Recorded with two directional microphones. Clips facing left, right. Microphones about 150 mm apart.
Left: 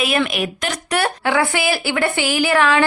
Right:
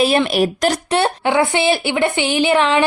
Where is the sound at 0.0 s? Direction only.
30° right (ahead or behind).